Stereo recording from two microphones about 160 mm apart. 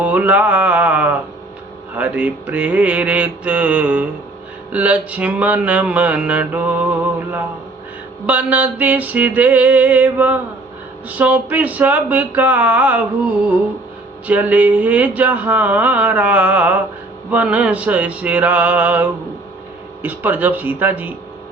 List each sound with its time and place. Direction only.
0.0 s mantra: 10° right (ahead or behind)
14.3 s mantra: 10° right (ahead or behind)